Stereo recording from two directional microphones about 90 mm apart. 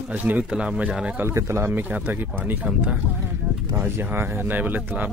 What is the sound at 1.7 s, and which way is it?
Speech, 20° right (ahead or behind).